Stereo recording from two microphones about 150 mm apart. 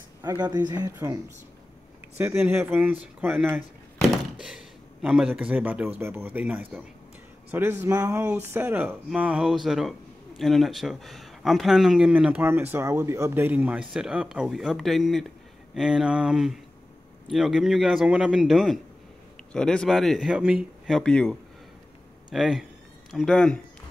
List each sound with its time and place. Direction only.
0.5 s speech: 25° right (ahead or behind)
4.1 s a man's voice: centre (ahead or behind)
21.0 s a man's voice: 5° left (ahead or behind)